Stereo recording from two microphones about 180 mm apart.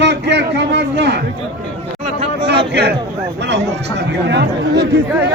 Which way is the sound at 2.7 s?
65° right (ahead or behind).